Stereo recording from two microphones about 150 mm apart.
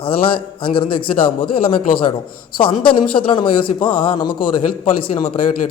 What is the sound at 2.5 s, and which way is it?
A man's voice, 35° left (ahead or behind).